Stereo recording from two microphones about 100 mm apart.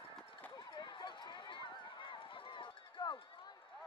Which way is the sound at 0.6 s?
45° left (ahead or behind).